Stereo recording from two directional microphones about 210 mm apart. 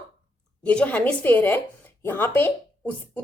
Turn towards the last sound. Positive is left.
turn(degrees=10)  # may be behind; listen again after turning